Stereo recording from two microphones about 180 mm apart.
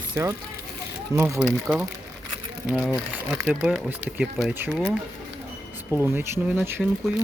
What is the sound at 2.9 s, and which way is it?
Speech, 10° right (ahead or behind).